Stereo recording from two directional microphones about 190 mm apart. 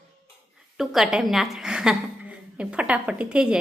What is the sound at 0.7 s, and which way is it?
A woman's voice, centre (ahead or behind).